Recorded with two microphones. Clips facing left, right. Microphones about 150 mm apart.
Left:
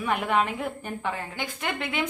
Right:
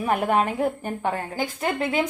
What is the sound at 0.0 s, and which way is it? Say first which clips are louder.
A woman's voice: right 3 dB; 45° right (ahead or behind).